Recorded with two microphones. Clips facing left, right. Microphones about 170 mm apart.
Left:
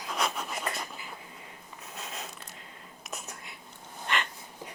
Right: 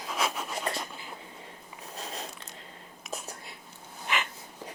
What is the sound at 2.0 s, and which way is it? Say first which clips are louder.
Zipper: right 2 dB; 30° right (ahead or behind).